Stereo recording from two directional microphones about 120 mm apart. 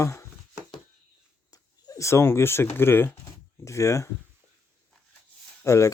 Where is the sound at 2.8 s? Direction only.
20° left (ahead or behind).